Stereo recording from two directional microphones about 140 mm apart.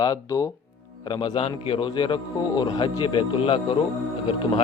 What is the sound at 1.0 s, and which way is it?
Speech, 35° left (ahead or behind).